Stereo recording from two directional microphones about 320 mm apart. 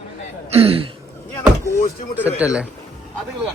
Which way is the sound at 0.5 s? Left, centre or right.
Centre.